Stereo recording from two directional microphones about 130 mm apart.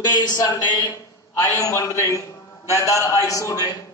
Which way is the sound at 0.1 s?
30° left (ahead or behind).